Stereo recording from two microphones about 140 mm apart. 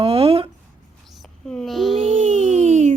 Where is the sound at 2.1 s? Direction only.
60° right (ahead or behind).